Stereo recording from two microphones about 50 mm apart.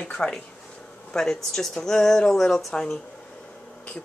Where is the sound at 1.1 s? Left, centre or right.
Centre.